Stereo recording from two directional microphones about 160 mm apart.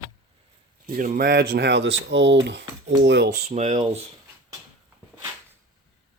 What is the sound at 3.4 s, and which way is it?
Speech, 45° right (ahead or behind).